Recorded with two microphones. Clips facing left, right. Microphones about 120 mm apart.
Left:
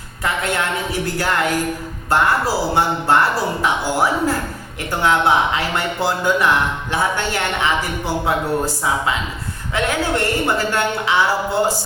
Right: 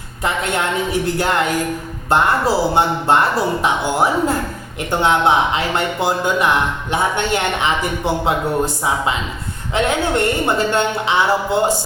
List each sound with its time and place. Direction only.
1.0 s speech: 20° right (ahead or behind)